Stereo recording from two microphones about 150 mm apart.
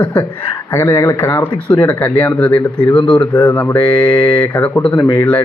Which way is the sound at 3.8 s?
35° left (ahead or behind).